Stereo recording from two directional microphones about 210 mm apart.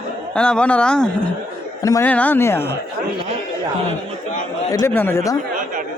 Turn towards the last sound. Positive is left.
turn(degrees=15)  # may be behind; listen again after turning